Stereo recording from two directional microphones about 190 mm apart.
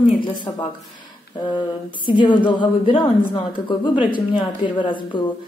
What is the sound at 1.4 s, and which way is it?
A woman's voice, 25° left (ahead or behind).